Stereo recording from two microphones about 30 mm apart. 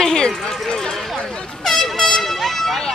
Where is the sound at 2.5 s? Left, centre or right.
Centre.